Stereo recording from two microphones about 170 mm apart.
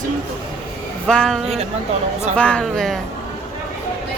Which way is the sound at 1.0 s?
5° left (ahead or behind).